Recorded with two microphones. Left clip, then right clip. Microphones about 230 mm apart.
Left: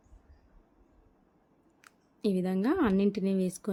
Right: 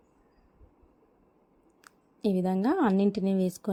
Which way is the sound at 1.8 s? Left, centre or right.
Centre.